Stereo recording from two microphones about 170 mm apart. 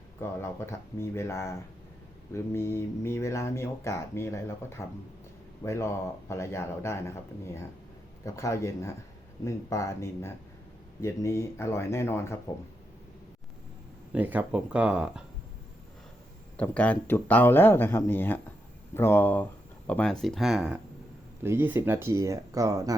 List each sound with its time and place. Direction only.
0.2 s speech: 15° left (ahead or behind)
14.1 s speech: 10° right (ahead or behind)
16.6 s speech: 10° left (ahead or behind)
21.4 s speech: 15° right (ahead or behind)